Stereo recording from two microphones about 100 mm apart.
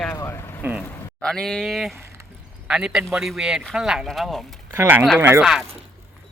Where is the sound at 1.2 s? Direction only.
5° left (ahead or behind).